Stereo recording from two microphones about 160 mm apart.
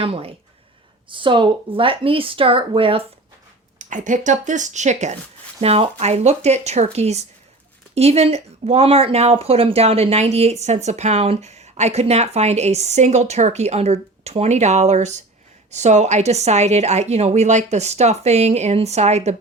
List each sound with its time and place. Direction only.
0.0 s speech: 35° right (ahead or behind)
3.8 s speech: 50° right (ahead or behind)